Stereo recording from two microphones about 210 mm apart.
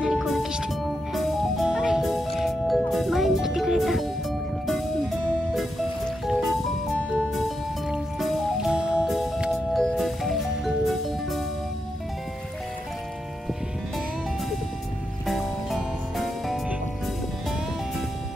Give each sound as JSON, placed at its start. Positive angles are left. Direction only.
{"t": 0.0, "sound": "music", "side_deg": 0}
{"t": 15.2, "sound": "music", "side_deg": 0}